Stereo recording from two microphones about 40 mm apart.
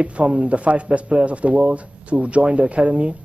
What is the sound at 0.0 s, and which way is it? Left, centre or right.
A man's voice, right.